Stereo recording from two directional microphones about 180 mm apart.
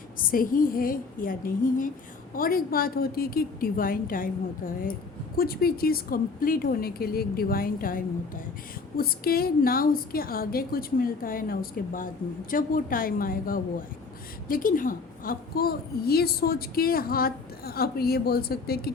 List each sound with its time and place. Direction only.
0.3 s a woman's voice: 50° left (ahead or behind)